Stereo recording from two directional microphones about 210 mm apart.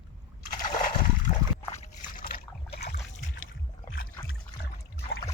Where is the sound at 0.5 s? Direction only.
40° left (ahead or behind).